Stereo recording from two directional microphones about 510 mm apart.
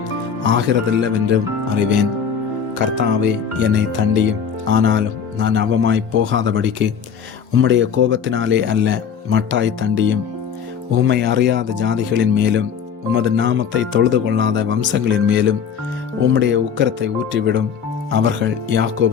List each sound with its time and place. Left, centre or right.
0.4 s speech: right